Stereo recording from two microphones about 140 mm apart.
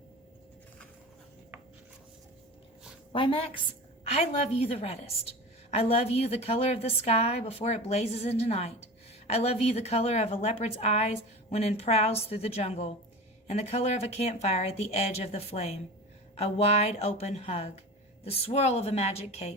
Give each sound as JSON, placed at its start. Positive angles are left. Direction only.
{"t": 3.1, "sound": "a woman's voice", "side_deg": 40}